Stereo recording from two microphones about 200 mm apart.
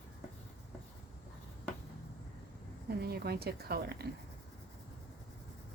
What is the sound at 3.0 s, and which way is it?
A woman's voice, 50° right (ahead or behind).